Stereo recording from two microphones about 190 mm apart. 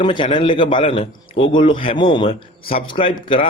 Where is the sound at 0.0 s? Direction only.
25° left (ahead or behind).